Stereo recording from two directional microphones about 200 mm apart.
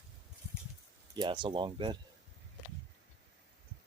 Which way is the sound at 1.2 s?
25° right (ahead or behind).